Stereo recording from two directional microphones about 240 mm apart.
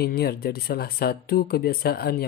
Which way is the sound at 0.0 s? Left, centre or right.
Left.